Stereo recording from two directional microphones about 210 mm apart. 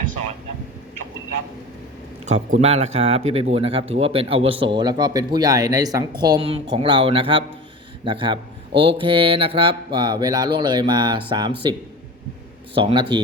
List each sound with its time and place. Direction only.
2.2 s speech: 35° right (ahead or behind)
12.7 s speech: 25° right (ahead or behind)